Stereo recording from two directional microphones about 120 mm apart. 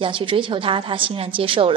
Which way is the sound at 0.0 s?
45° right (ahead or behind).